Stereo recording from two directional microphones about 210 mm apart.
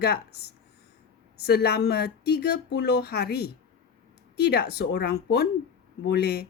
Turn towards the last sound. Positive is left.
turn(degrees=50)  # may be behind; listen again after turning